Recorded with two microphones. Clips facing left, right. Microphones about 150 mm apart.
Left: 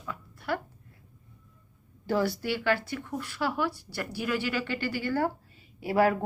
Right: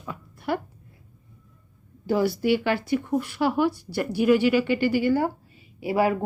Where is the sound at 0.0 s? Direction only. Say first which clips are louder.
Right 5 dB; 20° right (ahead or behind).